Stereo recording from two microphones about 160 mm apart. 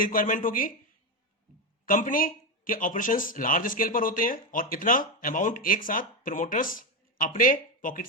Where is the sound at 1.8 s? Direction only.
55° left (ahead or behind).